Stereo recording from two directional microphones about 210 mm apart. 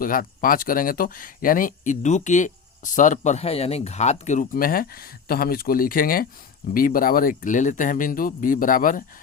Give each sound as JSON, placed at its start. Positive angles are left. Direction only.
{"t": 0.0, "sound": "speech", "side_deg": 40}